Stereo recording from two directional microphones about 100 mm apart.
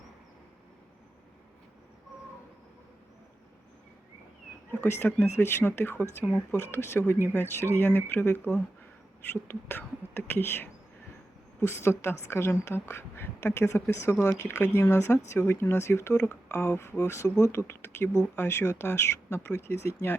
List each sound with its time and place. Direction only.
4.7 s speech: 20° left (ahead or behind)